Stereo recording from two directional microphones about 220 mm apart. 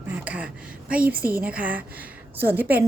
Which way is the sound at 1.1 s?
40° right (ahead or behind).